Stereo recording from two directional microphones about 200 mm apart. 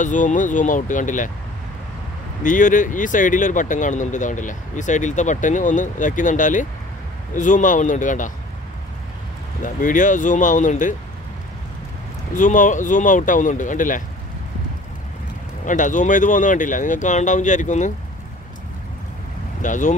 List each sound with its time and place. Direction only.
0.0 s speech: 40° left (ahead or behind)
2.4 s speech: 40° left (ahead or behind)
9.6 s speech: 40° left (ahead or behind)
12.4 s speech: 40° left (ahead or behind)
15.6 s speech: 40° left (ahead or behind)
19.6 s speech: 40° left (ahead or behind)